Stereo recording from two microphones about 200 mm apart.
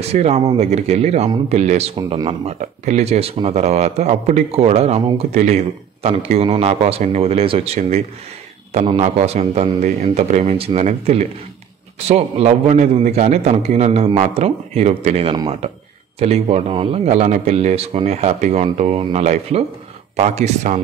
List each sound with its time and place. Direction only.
0.1 s speech: 35° right (ahead or behind)